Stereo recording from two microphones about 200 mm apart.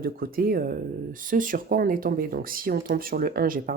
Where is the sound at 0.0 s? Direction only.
45° right (ahead or behind).